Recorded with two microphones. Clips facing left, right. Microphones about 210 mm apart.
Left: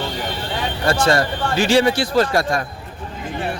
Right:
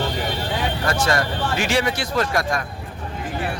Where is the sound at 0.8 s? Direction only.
30° left (ahead or behind).